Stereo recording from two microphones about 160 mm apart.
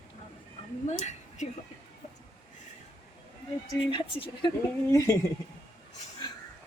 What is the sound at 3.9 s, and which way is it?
Speech, 30° left (ahead or behind).